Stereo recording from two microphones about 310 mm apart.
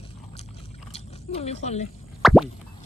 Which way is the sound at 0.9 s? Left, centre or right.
Centre.